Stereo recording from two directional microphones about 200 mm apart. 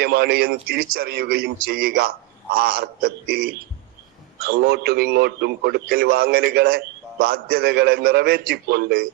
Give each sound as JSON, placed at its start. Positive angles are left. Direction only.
{"t": 0.0, "sound": "a man's voice", "side_deg": -50}